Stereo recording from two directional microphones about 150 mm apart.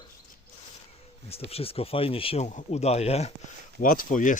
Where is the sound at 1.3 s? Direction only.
40° left (ahead or behind).